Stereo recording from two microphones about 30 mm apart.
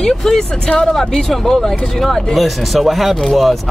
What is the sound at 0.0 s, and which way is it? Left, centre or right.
Vehicle, left.